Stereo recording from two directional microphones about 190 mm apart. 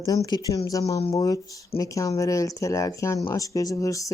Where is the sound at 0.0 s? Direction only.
20° left (ahead or behind).